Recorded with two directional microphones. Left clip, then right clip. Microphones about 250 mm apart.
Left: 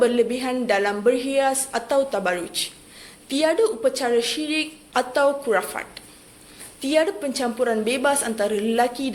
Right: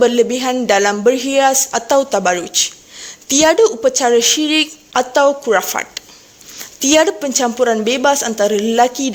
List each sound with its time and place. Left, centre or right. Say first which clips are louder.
0.0 s a woman's voice: right 7 dB; right